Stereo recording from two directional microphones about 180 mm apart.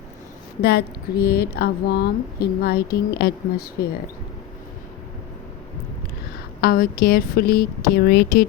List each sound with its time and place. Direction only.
0.6 s speech: 65° left (ahead or behind)
6.6 s speech: 60° left (ahead or behind)